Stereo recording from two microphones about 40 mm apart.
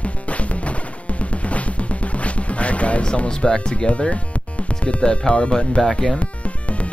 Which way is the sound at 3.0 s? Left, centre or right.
Left.